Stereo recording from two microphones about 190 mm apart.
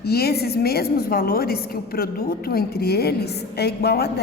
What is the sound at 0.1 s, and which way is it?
A woman's voice, 55° left (ahead or behind).